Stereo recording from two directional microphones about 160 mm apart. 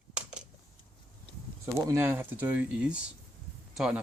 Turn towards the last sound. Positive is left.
turn(degrees=-5)  # may be behind; listen again after turning